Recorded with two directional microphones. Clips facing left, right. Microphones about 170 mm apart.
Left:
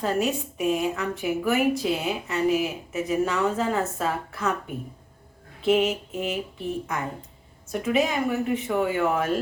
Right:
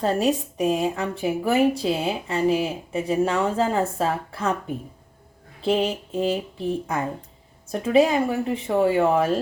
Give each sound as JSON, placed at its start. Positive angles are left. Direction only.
{"t": 0.0, "sound": "a woman's voice", "side_deg": -35}
{"t": 5.6, "sound": "a woman's voice", "side_deg": -30}